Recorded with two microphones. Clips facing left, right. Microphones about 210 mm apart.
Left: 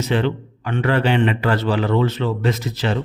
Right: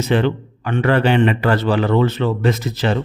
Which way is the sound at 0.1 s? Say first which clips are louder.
Right 3 dB; 50° right (ahead or behind).